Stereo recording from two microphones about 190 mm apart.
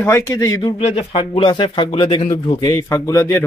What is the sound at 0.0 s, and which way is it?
Speech, 15° left (ahead or behind).